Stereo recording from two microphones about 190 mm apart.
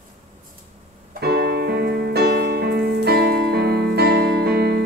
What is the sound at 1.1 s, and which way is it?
Piano, 55° right (ahead or behind).